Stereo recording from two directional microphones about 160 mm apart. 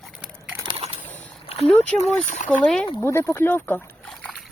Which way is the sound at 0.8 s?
40° right (ahead or behind).